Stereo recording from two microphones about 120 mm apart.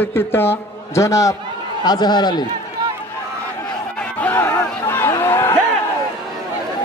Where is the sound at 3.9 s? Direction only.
15° left (ahead or behind).